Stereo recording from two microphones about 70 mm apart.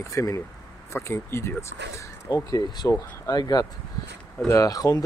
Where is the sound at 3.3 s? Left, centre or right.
Left.